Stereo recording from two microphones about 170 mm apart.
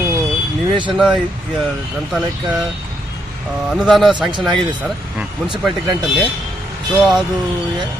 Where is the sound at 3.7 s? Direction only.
Centre (ahead or behind).